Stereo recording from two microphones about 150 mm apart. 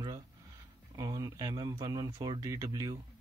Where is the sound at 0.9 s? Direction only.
20° right (ahead or behind).